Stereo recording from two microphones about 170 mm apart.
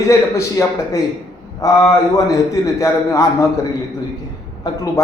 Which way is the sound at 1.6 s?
20° left (ahead or behind).